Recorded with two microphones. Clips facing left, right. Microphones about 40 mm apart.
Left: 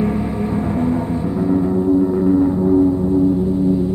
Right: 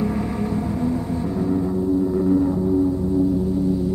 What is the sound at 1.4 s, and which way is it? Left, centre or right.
Music, left.